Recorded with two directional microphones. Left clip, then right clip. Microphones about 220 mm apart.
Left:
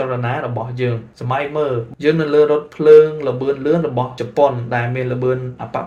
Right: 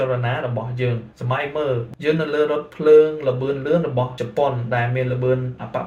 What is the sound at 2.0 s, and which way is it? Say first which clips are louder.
Speech: left 7 dB; 50° left (ahead or behind).